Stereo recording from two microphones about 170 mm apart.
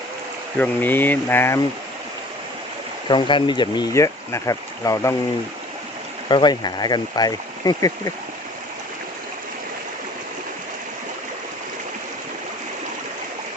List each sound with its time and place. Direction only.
0.6 s speech: 10° left (ahead or behind)
3.1 s speech: 30° left (ahead or behind)
6.2 s speech: 25° left (ahead or behind)